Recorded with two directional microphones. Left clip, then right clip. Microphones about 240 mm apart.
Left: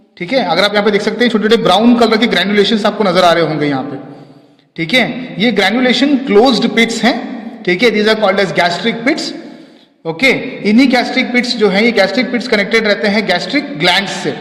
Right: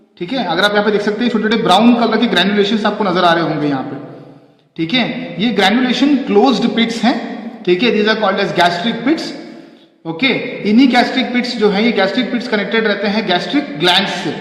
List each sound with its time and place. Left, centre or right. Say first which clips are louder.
0.3 s a man's voice: left 3 dB; left